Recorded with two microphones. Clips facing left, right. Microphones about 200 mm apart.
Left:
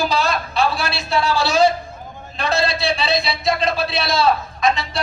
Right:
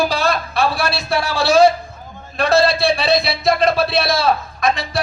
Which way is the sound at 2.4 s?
55° right (ahead or behind).